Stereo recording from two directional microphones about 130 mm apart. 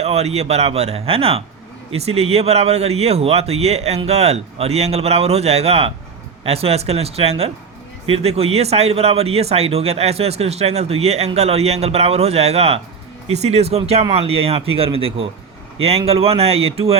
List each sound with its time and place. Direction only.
0.0 s speech: 55° right (ahead or behind)